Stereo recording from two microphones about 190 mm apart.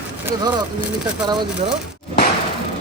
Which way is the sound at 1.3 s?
25° right (ahead or behind).